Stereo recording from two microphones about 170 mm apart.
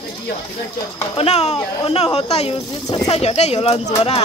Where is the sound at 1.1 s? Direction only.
40° left (ahead or behind).